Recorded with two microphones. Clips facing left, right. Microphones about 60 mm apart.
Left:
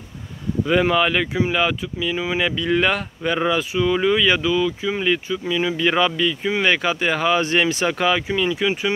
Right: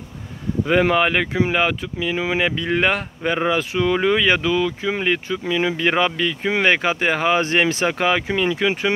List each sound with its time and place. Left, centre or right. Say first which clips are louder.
0.7 s speech: right 1 dB; right
3.7 s speech: even; right
6.7 s speech: right 1 dB; right